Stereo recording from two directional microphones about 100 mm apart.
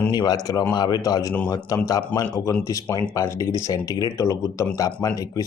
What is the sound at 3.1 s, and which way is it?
Speech, 35° left (ahead or behind).